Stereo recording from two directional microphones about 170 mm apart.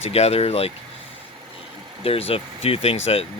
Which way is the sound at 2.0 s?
35° left (ahead or behind).